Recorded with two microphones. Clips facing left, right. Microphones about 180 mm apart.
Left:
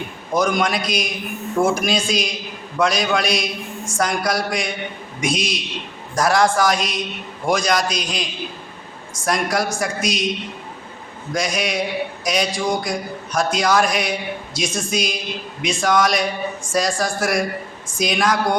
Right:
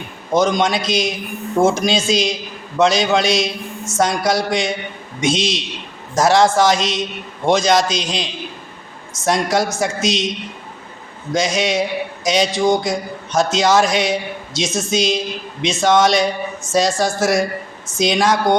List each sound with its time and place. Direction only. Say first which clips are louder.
0.3 s speech: right 3 dB; 20° right (ahead or behind)
11.3 s speech: right 4 dB; 25° right (ahead or behind)